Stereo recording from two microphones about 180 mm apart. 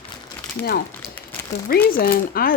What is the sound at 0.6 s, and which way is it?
Speech, 60° left (ahead or behind).